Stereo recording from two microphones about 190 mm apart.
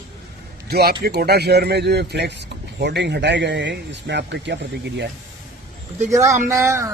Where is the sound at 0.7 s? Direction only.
55° right (ahead or behind).